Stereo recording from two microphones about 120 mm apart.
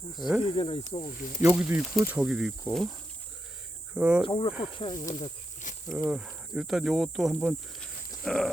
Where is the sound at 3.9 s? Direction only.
10° right (ahead or behind).